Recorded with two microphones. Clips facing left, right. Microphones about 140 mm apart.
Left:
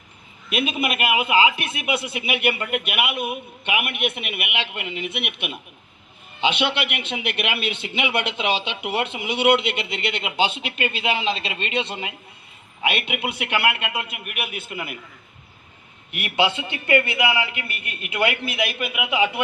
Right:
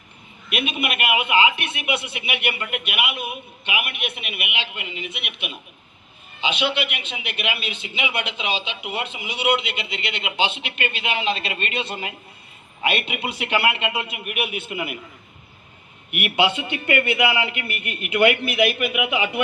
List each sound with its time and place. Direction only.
0.5 s a man's voice: 35° left (ahead or behind)
12.8 s a man's voice: 10° left (ahead or behind)
16.3 s a man's voice: 15° right (ahead or behind)
17.7 s speech: 25° left (ahead or behind)
18.9 s a man's voice: 25° right (ahead or behind)